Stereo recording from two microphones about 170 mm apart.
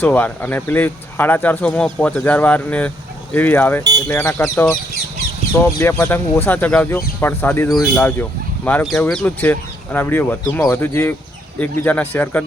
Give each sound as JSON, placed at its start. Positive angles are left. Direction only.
{"t": 0.0, "sound": "speech", "side_deg": 10}
{"t": 4.4, "sound": "speech", "side_deg": 5}
{"t": 5.5, "sound": "speech", "side_deg": 15}